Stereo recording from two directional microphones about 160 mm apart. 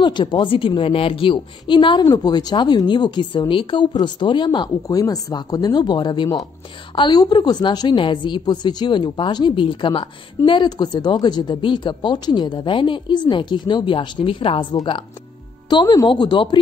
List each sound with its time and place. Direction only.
0.0 s a woman's voice: 30° left (ahead or behind)